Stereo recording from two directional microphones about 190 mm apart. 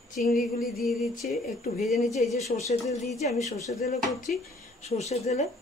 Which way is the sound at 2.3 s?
35° left (ahead or behind).